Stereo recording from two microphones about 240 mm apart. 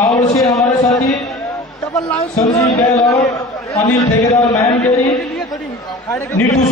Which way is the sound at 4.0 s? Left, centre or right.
Centre.